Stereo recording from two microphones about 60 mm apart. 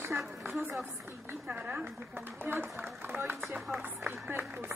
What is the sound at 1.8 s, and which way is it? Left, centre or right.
Speech, right.